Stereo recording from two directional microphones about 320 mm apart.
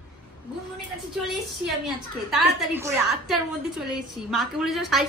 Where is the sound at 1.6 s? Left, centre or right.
Centre.